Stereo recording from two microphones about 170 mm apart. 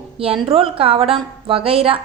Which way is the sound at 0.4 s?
30° right (ahead or behind).